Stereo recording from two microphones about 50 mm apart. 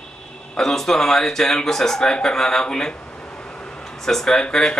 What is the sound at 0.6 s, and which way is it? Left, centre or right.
Speech, centre.